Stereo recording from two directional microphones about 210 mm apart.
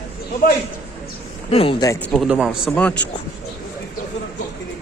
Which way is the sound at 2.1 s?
Centre (ahead or behind).